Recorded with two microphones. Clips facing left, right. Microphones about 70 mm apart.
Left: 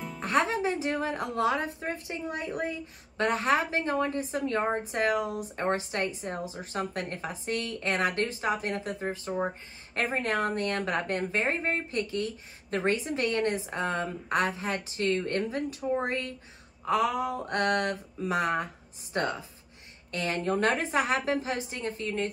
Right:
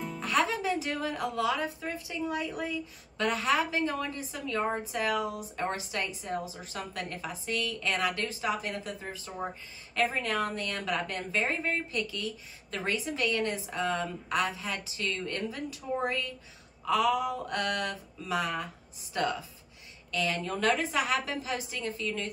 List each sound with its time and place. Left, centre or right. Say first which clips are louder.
0.2 s speech: left 2 dB; left